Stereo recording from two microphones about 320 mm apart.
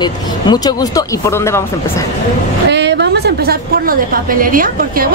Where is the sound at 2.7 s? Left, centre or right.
Right.